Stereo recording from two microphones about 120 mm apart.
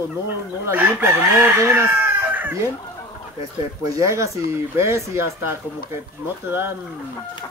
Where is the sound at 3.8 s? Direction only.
25° right (ahead or behind).